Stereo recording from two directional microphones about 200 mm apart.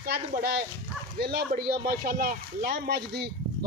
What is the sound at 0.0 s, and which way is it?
Speech, 50° right (ahead or behind).